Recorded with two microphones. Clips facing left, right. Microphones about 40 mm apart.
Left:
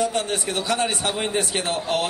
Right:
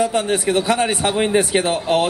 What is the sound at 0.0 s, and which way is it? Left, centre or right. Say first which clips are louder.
A man's voice: right 5 dB; centre.